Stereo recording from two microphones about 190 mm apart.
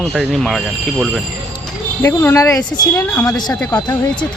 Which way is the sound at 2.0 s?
15° left (ahead or behind).